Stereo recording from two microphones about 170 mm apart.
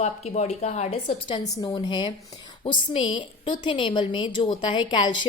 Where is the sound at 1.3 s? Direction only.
30° left (ahead or behind).